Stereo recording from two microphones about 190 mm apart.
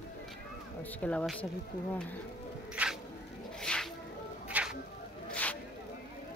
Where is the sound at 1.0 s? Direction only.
5° left (ahead or behind).